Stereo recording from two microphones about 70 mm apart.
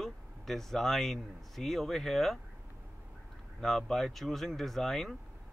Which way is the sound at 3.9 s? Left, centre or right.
Centre.